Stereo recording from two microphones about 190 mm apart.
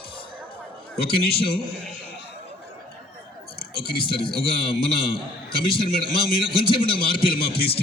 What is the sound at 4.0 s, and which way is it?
A man's voice, 25° left (ahead or behind).